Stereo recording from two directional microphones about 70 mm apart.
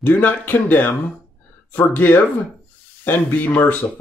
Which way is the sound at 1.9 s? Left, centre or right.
Left.